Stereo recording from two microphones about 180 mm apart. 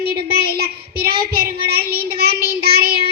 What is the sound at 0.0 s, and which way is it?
Child singing, 60° right (ahead or behind).